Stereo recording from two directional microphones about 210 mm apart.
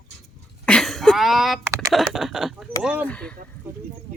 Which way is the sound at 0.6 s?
5° left (ahead or behind).